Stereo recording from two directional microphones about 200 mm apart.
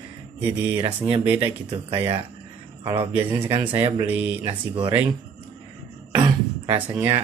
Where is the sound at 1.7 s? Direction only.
25° right (ahead or behind).